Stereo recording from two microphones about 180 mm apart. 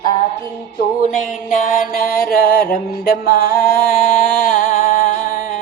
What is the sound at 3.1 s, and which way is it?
Music, 55° left (ahead or behind).